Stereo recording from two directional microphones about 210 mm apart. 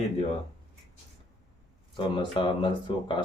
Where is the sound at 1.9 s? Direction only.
20° left (ahead or behind).